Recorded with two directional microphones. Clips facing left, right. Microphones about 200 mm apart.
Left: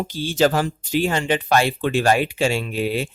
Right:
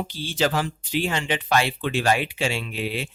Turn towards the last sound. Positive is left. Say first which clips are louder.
# left 6 dB
turn(degrees=45)  # may be behind; listen again after turning